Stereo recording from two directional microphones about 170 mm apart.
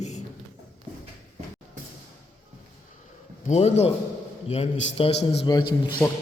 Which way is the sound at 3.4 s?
40° left (ahead or behind).